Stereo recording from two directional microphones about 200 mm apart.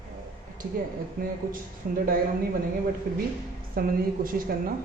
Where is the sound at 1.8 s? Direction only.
40° right (ahead or behind).